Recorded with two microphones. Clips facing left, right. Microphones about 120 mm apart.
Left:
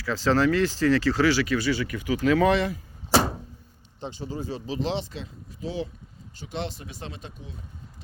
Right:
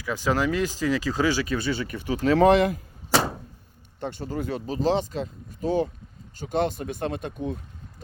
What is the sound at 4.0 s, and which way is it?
Speech, 55° right (ahead or behind).